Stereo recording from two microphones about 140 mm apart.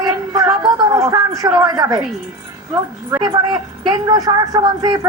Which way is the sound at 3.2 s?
30° right (ahead or behind).